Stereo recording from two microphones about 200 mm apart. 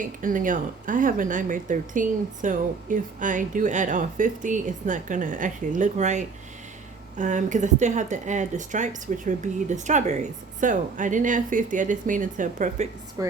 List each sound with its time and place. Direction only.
0.0 s speech: 40° right (ahead or behind)
13.2 s a woman's voice: 15° right (ahead or behind)